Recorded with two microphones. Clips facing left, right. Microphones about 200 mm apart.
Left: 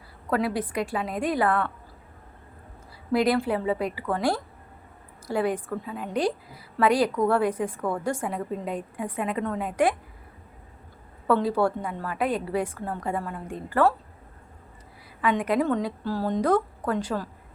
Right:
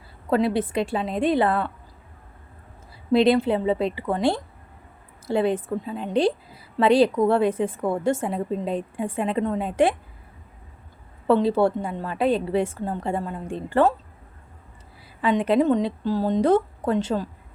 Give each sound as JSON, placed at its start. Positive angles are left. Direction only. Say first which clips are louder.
{"t": 0.3, "sound": "a woman's voice", "louder": "right 4 dB", "side_deg": -25}
{"t": 3.1, "sound": "a woman's voice", "louder": "right 5 dB", "side_deg": -25}
{"t": 11.3, "sound": "a woman's voice", "louder": "right 4 dB", "side_deg": -25}
{"t": 15.2, "sound": "a woman's voice", "louder": "right 4 dB", "side_deg": -25}